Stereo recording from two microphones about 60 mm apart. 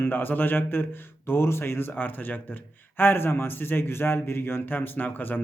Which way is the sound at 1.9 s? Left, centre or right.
Left.